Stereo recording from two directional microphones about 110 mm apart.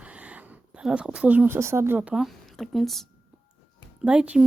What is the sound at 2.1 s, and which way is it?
Speech, centre (ahead or behind).